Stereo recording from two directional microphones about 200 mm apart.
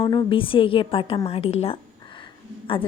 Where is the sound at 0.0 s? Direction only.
25° left (ahead or behind).